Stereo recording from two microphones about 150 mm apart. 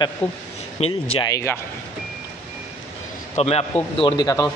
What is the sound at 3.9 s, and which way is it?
Speech, 30° left (ahead or behind).